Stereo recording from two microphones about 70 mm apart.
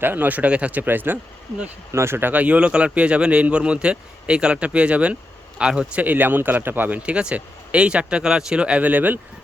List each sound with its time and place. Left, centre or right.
0.0 s speech: right